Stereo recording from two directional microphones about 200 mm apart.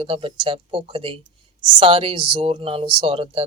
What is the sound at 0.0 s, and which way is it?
A woman's voice, 25° right (ahead or behind).